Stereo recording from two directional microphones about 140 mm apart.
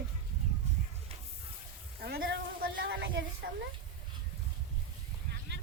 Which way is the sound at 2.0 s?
90° right.